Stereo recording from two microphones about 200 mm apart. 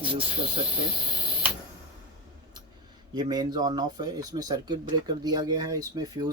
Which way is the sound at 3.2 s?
20° right (ahead or behind).